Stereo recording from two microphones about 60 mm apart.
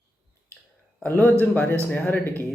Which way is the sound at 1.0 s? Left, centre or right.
Left.